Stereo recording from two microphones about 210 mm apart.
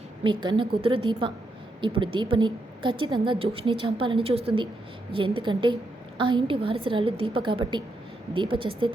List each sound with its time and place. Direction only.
0.2 s a woman's voice: 20° right (ahead or behind)